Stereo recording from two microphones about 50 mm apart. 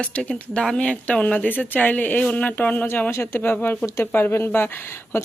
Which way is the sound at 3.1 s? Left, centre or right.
Left.